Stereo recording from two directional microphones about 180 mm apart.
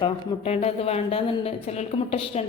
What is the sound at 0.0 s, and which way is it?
A woman's voice, 35° left (ahead or behind).